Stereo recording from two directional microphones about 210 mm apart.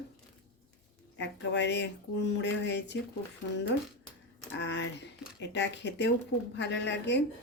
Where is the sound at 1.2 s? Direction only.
55° left (ahead or behind).